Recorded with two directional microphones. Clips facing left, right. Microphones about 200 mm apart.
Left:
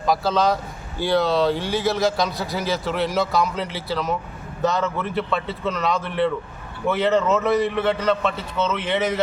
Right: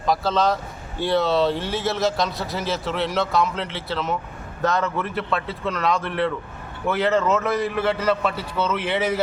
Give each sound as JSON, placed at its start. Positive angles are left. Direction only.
{"t": 0.0, "sound": "speech", "side_deg": 0}